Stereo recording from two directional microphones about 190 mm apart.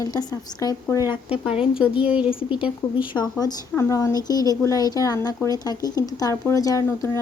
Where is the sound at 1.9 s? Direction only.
5° right (ahead or behind).